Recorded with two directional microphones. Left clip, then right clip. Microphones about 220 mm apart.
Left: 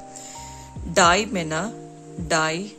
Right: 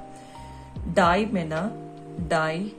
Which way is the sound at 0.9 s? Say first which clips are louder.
Left 3 dB; 35° left (ahead or behind).